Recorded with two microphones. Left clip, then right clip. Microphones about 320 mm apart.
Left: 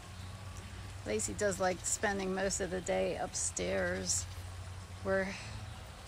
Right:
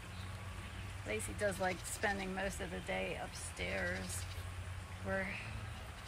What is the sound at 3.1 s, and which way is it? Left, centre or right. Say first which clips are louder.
Speech: left 7 dB; left.